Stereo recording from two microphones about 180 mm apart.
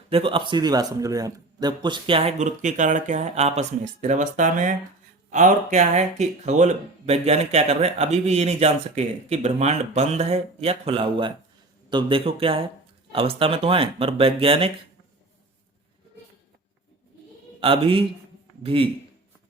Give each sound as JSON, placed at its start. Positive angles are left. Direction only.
{"t": 0.1, "sound": "speech", "side_deg": -30}
{"t": 17.6, "sound": "speech", "side_deg": -30}